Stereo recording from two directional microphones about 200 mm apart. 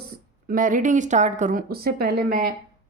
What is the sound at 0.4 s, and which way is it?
A woman's voice, 45° right (ahead or behind).